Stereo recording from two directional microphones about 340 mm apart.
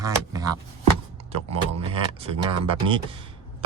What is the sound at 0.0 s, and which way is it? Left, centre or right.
Speech, centre.